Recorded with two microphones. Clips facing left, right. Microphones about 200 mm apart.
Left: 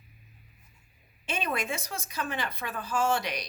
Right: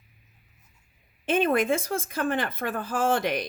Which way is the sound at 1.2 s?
50° right (ahead or behind).